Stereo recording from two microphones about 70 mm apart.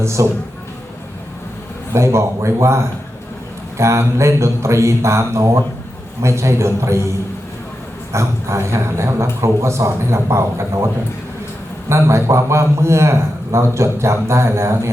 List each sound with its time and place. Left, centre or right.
0.0 s a man's voice: right
1.9 s a man's voice: right
8.1 s a man's voice: right
11.9 s a man's voice: right